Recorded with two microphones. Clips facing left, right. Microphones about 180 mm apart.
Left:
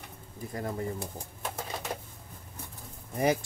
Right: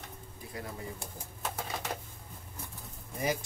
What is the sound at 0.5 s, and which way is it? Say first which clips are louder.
Speech: left 7 dB; 45° left (ahead or behind).